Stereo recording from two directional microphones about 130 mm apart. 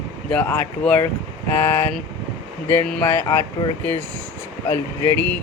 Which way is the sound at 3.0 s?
20° left (ahead or behind).